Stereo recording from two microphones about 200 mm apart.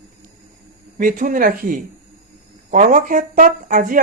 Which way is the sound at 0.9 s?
45° right (ahead or behind).